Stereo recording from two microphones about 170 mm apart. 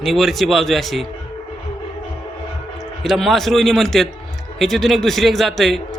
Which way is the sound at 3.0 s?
Centre (ahead or behind).